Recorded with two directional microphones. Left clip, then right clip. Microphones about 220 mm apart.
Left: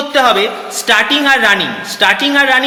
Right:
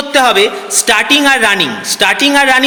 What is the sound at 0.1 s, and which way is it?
A woman's voice, 45° right (ahead or behind).